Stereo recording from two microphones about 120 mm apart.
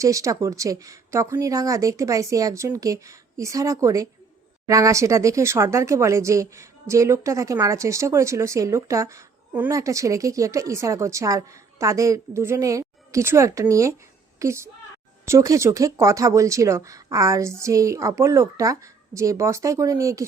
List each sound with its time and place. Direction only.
0.0 s a woman's voice: 25° right (ahead or behind)